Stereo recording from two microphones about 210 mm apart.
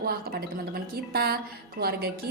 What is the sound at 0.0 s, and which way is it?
Speech, 45° right (ahead or behind).